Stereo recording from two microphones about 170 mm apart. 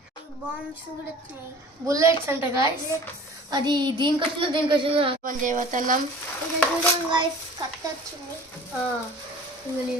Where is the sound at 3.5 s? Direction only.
25° right (ahead or behind).